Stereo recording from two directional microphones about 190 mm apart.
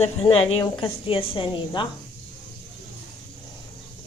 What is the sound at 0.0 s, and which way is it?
Speech, 30° left (ahead or behind).